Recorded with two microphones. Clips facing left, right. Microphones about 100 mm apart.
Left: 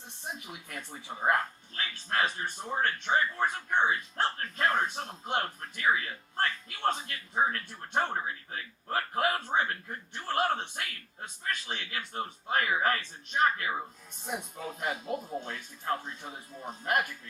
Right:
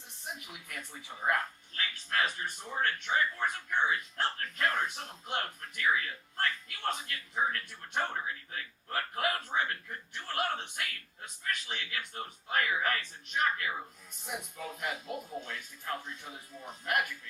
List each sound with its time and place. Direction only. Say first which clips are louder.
0.3 s speech: left 3 dB; 30° left (ahead or behind)